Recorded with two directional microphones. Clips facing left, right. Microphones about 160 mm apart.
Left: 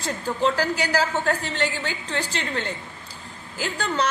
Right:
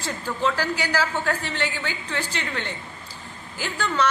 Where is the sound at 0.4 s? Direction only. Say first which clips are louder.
Left 2 dB; 40° left (ahead or behind).